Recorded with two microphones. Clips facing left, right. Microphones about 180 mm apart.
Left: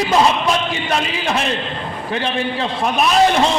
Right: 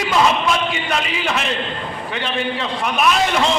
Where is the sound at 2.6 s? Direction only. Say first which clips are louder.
Left 3 dB; 35° left (ahead or behind).